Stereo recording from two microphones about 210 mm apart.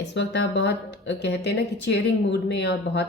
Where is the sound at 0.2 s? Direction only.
55° left (ahead or behind).